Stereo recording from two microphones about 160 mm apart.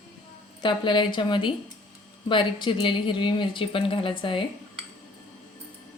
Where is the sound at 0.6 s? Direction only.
30° left (ahead or behind).